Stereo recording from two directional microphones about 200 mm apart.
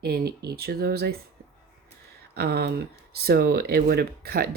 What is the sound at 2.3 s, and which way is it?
Speech, 50° right (ahead or behind).